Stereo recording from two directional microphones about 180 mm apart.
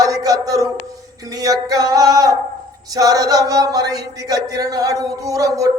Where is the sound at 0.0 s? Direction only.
20° right (ahead or behind).